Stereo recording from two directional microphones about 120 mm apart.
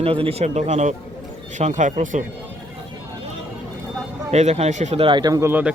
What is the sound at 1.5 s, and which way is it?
Speech, 85° right.